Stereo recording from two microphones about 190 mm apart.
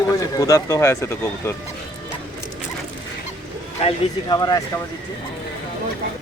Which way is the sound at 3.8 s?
20° left (ahead or behind).